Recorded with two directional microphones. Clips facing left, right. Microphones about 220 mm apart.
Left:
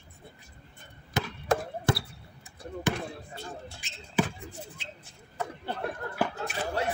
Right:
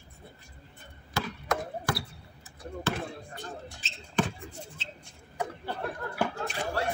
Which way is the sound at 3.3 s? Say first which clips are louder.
Even; 15° right (ahead or behind).